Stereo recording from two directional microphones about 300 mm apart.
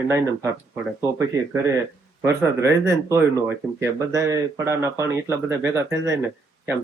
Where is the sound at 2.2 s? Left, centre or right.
Centre.